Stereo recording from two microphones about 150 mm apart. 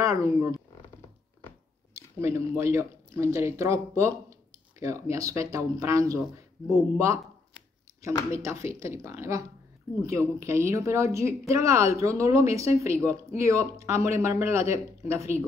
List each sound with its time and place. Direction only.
0.0 s speech: 20° right (ahead or behind)
2.0 s speech: 20° right (ahead or behind)
8.3 s speech: 20° right (ahead or behind)